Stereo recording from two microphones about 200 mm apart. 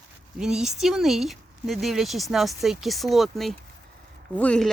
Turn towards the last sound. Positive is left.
turn(degrees=5)  # may be behind; listen again after turning